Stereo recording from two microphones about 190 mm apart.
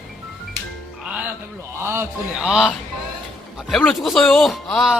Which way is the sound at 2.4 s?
Centre (ahead or behind).